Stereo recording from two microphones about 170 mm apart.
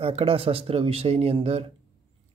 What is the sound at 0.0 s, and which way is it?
Speech, 35° right (ahead or behind).